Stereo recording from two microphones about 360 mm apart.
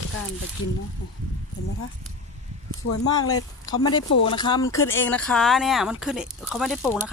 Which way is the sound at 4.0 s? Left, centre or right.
Left.